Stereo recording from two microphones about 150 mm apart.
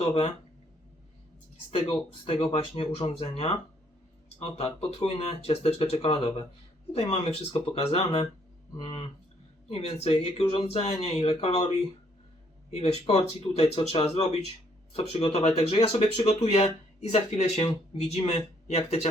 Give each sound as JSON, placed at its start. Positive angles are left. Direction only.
{"t": 0.0, "sound": "speech", "side_deg": 40}
{"t": 1.7, "sound": "speech", "side_deg": 40}
{"t": 8.8, "sound": "speech", "side_deg": 35}
{"t": 12.7, "sound": "speech", "side_deg": 45}